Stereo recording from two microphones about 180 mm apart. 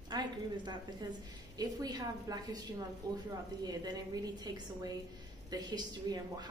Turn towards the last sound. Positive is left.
turn(degrees=-20)  # may be behind; listen again after turning